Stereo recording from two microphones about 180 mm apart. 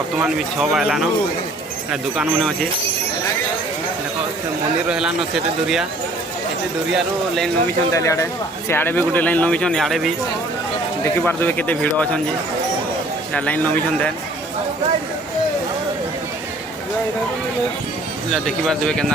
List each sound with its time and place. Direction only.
0.2 s speech: 5° right (ahead or behind)
4.9 s speech: 5° right (ahead or behind)
6.9 s speech: centre (ahead or behind)
7.9 s speech: 15° left (ahead or behind)
13.3 s speech: 10° left (ahead or behind)
18.3 s speech: 5° left (ahead or behind)